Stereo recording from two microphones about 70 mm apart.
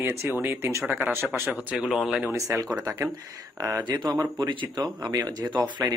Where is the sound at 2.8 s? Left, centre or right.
Right.